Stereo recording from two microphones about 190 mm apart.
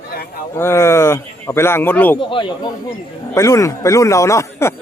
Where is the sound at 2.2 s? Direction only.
25° left (ahead or behind).